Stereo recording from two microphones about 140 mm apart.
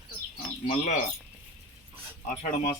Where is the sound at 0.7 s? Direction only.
60° left (ahead or behind).